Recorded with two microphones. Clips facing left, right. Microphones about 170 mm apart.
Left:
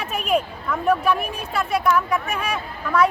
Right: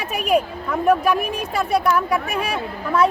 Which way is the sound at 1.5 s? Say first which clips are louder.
Right 1 dB; 35° right (ahead or behind).